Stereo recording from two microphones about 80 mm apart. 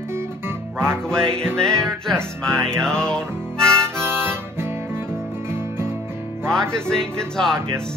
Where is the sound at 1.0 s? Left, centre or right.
Centre.